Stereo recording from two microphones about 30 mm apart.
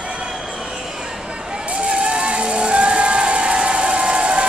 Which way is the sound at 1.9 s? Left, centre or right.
Right.